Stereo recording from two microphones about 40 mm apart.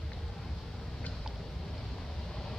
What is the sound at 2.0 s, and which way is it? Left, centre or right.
Vehicle, centre.